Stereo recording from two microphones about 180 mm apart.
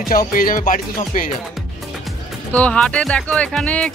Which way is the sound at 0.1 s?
50° left (ahead or behind).